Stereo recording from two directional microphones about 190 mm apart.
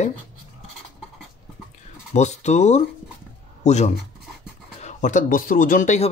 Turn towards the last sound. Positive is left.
turn(degrees=40)  # may be behind; listen again after turning